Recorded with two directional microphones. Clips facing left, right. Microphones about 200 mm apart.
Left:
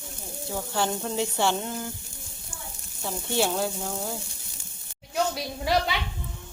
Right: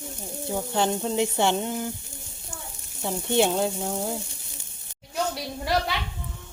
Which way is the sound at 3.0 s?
20° right (ahead or behind).